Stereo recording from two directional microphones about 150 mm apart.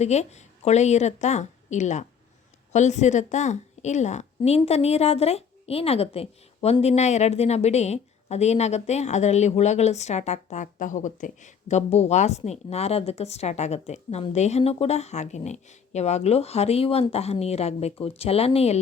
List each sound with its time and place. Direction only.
0.0 s a woman's voice: 50° left (ahead or behind)